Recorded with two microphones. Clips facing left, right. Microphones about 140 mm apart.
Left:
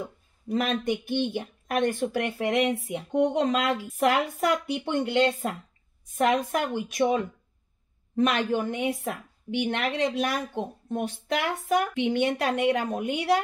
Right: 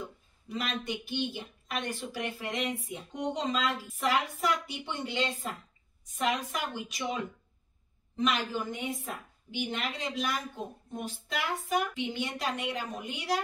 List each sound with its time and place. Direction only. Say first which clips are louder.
0.5 s a woman's voice: left 9 dB; 50° left (ahead or behind)